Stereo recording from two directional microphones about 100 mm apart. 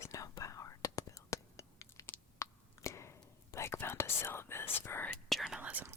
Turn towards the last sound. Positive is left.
turn(degrees=-15)  # may be behind; listen again after turning